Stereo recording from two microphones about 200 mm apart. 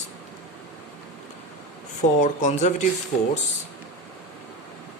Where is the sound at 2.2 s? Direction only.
35° left (ahead or behind).